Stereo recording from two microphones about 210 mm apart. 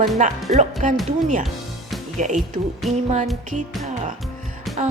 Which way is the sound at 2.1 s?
35° right (ahead or behind).